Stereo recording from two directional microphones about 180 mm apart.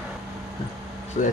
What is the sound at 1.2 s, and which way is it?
Speech, 45° left (ahead or behind).